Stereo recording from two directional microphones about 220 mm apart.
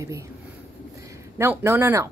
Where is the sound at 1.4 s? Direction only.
10° right (ahead or behind).